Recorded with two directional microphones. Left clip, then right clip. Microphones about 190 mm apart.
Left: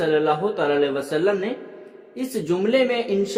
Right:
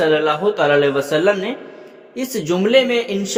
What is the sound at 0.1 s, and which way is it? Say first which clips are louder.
A man's voice: right 4 dB; 20° right (ahead or behind).